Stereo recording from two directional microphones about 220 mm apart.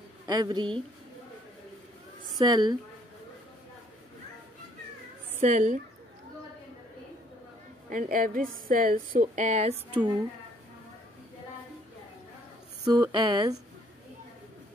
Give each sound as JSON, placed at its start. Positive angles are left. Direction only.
{"t": 0.3, "sound": "speech", "side_deg": -20}
{"t": 2.3, "sound": "speech", "side_deg": -20}
{"t": 5.4, "sound": "a woman's voice", "side_deg": -35}
{"t": 7.9, "sound": "a woman's voice", "side_deg": -40}
{"t": 12.8, "sound": "speech", "side_deg": -15}